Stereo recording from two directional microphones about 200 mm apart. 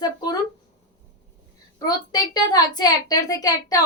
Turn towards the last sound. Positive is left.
turn(degrees=20)  # may be behind; listen again after turning